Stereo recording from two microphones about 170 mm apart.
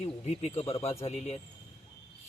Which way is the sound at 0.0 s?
40° left (ahead or behind).